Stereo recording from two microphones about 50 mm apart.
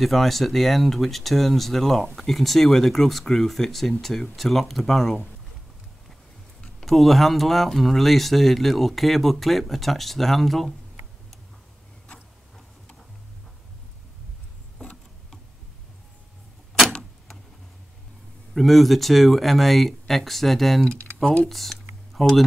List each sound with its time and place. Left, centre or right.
0.0 s speech: centre
6.8 s speech: centre
18.5 s speech: centre
21.2 s speech: centre
21.5 s a sound: centre